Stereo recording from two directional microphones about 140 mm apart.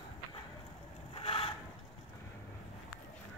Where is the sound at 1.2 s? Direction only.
40° left (ahead or behind).